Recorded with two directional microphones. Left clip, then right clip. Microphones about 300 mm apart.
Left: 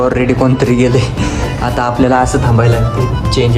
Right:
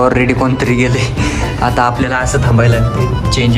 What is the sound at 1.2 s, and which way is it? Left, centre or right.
Music, centre.